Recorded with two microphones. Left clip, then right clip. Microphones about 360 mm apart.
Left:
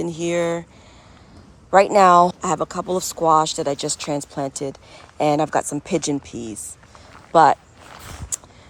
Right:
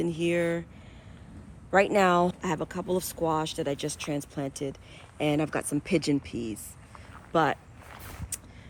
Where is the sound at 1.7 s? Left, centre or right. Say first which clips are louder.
Left 10 dB; centre.